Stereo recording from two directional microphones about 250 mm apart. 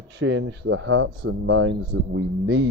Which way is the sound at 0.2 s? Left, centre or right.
Right.